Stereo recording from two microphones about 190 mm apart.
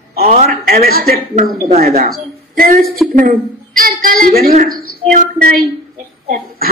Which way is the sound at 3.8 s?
45° right (ahead or behind).